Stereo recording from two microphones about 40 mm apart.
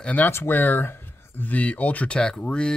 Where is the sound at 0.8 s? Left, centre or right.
Left.